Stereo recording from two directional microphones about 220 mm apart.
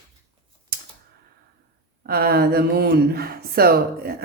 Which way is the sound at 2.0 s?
45° right (ahead or behind).